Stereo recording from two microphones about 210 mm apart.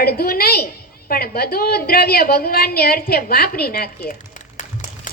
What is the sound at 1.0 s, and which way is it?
A woman's voice, 45° left (ahead or behind).